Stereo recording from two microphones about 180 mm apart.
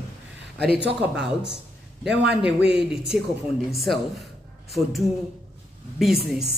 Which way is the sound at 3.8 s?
Centre (ahead or behind).